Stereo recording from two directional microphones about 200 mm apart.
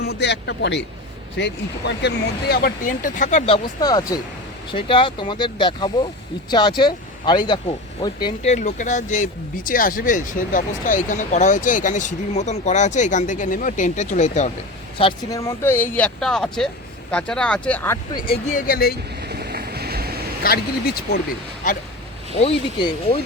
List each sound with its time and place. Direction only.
0.0 s speech: 55° left (ahead or behind); by 8.3 s 20° left (ahead or behind)
8.4 s speech: 35° left (ahead or behind)
14.9 s speech: 25° left (ahead or behind)
18.4 s speech: 45° left (ahead or behind)
19.2 s vehicle: 55° right (ahead or behind)
20.4 s speech: 50° left (ahead or behind)
22.4 s speech: 30° left (ahead or behind)